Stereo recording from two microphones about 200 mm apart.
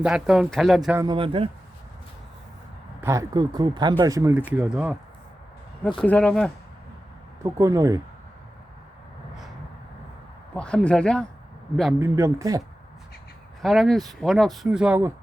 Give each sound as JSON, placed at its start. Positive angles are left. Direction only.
{"t": 0.0, "sound": "speech", "side_deg": -5}
{"t": 0.9, "sound": "speech", "side_deg": -25}
{"t": 3.0, "sound": "speech", "side_deg": -15}
{"t": 6.0, "sound": "speech", "side_deg": 5}
{"t": 7.4, "sound": "speech", "side_deg": -15}
{"t": 10.5, "sound": "speech", "side_deg": 5}
{"t": 11.9, "sound": "speech", "side_deg": -15}
{"t": 13.6, "sound": "speech", "side_deg": 0}